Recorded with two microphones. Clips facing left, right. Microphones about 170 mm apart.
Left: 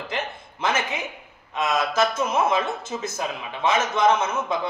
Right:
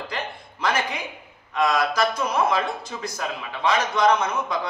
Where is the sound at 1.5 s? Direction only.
25° left (ahead or behind).